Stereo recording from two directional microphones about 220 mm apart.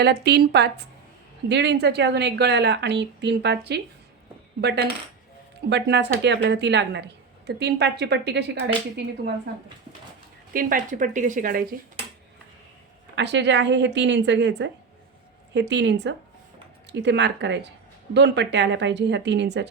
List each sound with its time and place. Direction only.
0.0 s a woman's voice: 50° right (ahead or behind)
10.5 s speech: 40° right (ahead or behind)
13.1 s a woman's voice: 55° right (ahead or behind)